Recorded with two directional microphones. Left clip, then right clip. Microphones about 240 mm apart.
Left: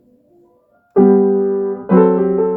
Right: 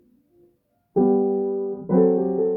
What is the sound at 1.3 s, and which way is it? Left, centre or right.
Music, left.